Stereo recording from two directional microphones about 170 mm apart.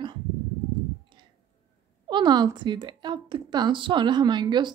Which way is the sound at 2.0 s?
25° right (ahead or behind).